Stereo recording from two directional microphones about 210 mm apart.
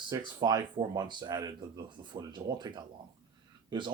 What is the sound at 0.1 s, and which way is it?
Speech, 20° right (ahead or behind).